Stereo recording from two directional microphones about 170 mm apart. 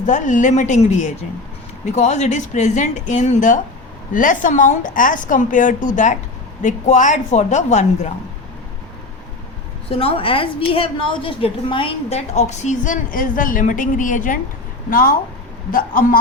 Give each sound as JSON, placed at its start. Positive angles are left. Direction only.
{"t": 0.0, "sound": "a woman's voice", "side_deg": 45}
{"t": 9.9, "sound": "a woman's voice", "side_deg": 35}